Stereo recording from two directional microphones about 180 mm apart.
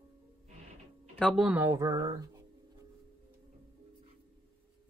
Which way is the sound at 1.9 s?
30° right (ahead or behind).